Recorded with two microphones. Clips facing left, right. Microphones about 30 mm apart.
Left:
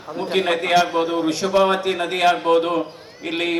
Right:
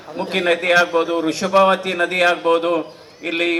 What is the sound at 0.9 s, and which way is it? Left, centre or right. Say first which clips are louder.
Speech: right 2 dB; right.